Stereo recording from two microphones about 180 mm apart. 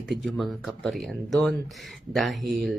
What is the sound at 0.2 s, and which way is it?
Speech, centre (ahead or behind).